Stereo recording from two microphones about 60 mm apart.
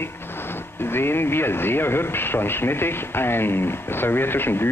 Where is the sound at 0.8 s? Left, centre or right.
Left.